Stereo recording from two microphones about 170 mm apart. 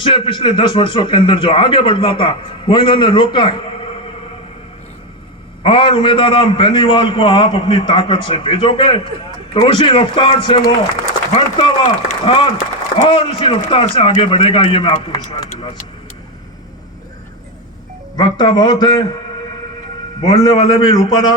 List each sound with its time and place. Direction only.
0.0 s a man's voice: 30° left (ahead or behind)
5.6 s a man's voice: 30° left (ahead or behind)
18.2 s a man's voice: 25° left (ahead or behind)
20.2 s a man's voice: 25° left (ahead or behind)